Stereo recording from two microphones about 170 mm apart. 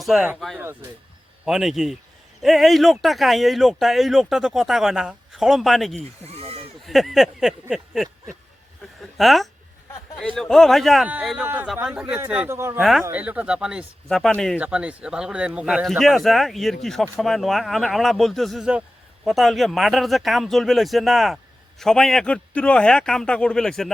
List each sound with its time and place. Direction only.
0.0 s speech: centre (ahead or behind)
6.0 s bleat: 35° right (ahead or behind)
6.8 s speech: centre (ahead or behind)
9.0 s a sound: centre (ahead or behind)
10.2 s a man's voice: 5° left (ahead or behind)
14.6 s speech: 5° right (ahead or behind)